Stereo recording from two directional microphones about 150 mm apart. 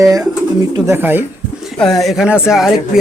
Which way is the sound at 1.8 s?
Centre (ahead or behind).